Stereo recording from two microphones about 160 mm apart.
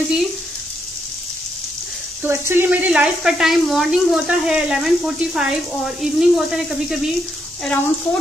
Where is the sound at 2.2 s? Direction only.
15° right (ahead or behind).